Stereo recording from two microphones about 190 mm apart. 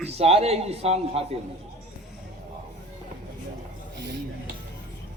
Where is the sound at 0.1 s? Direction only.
30° right (ahead or behind).